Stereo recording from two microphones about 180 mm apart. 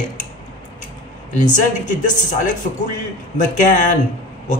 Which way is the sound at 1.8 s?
45° left (ahead or behind).